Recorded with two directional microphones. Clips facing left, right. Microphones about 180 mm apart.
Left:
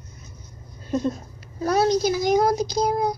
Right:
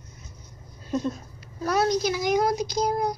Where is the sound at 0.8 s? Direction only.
40° left (ahead or behind).